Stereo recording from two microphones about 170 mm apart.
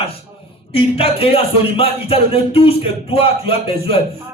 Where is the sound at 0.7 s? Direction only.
35° left (ahead or behind).